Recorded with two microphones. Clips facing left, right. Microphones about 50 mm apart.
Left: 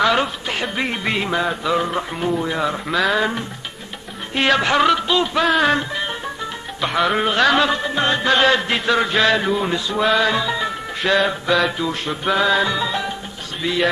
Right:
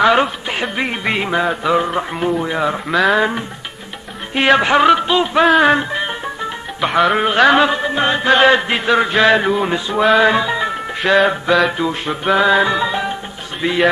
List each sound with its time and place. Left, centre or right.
0.0 s speech: centre
4.3 s music: centre
6.8 s speech: centre
9.2 s music: centre
11.5 s speech: centre
11.8 s music: centre
13.6 s speech: right